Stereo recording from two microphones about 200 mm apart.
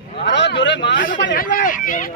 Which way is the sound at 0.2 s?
60° left (ahead or behind).